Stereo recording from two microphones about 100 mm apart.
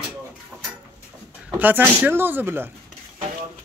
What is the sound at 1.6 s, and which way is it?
Speech, 15° right (ahead or behind).